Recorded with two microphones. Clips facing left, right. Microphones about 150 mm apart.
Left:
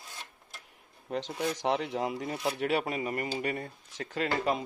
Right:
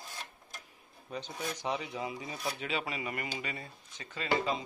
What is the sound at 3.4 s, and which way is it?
Speech, 60° left (ahead or behind).